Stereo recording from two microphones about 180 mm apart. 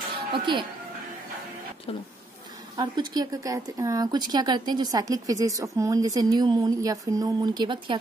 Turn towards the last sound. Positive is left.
turn(degrees=-25)  # may be behind; listen again after turning